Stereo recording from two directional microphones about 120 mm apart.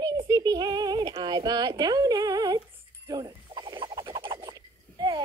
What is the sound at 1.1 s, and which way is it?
Speech, 35° right (ahead or behind).